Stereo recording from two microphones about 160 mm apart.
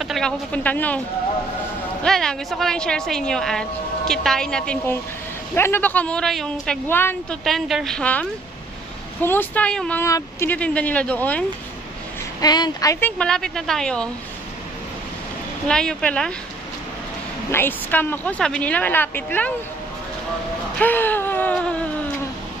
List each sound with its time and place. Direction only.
0.0 s speech: centre (ahead or behind)
2.0 s a woman's voice: centre (ahead or behind)
7.4 s a woman's voice: centre (ahead or behind)
12.4 s a woman's voice: 25° left (ahead or behind)
13.2 s a woman's voice: 5° left (ahead or behind)
15.7 s a woman's voice: 5° left (ahead or behind)
17.5 s speech: 15° left (ahead or behind)
20.8 s wail: 10° left (ahead or behind)